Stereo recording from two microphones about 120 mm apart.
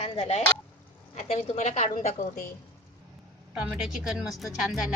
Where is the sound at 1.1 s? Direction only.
75° left (ahead or behind).